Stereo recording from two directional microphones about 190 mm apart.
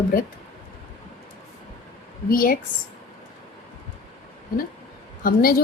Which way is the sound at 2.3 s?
50° left (ahead or behind).